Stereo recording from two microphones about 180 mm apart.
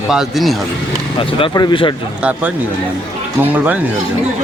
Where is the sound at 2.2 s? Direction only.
5° right (ahead or behind).